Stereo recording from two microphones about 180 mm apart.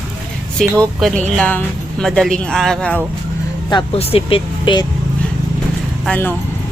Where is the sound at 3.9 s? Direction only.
35° left (ahead or behind).